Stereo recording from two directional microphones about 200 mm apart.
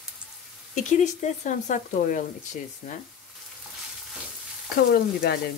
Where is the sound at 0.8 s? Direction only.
35° left (ahead or behind).